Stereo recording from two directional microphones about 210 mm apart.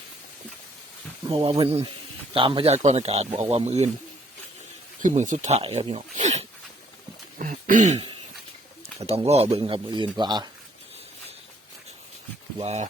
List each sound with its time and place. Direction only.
1.3 s speech: 25° right (ahead or behind)
5.0 s speech: 35° right (ahead or behind)
7.3 s throat clearing: 40° right (ahead or behind)
9.0 s speech: 30° right (ahead or behind)
12.5 s speech: 30° right (ahead or behind)